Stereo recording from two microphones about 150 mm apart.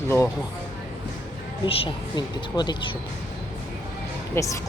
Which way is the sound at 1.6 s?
35° left (ahead or behind).